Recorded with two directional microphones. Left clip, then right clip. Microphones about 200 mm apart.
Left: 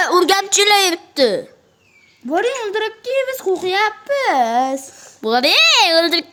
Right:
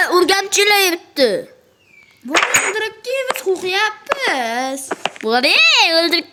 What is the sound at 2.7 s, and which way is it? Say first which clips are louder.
A child's voice: left 2 dB; 45° left (ahead or behind).